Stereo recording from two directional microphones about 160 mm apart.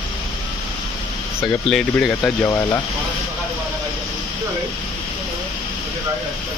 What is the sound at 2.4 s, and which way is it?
Speech, 20° left (ahead or behind).